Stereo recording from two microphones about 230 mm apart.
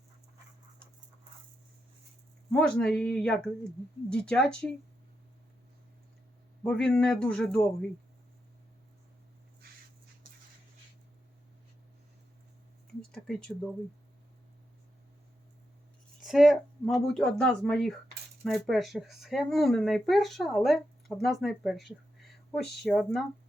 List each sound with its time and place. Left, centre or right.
2.5 s speech: centre
6.6 s speech: centre
13.1 s a sound: centre
16.2 s speech: centre